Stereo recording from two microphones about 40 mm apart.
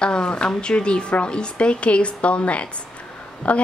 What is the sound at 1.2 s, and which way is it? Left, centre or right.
Speech, left.